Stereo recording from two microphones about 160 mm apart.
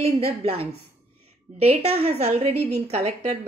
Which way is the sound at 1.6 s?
40° right (ahead or behind).